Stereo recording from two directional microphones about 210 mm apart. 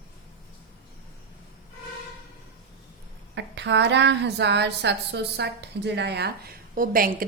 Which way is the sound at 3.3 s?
55° right (ahead or behind).